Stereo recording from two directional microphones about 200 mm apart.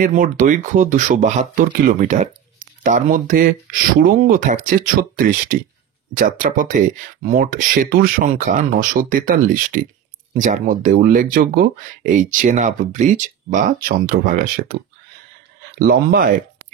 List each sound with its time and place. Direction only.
0.0 s speech: 40° right (ahead or behind)
15.9 s speech: 50° right (ahead or behind)